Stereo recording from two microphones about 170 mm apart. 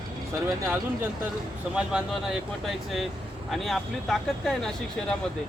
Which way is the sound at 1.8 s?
5° right (ahead or behind).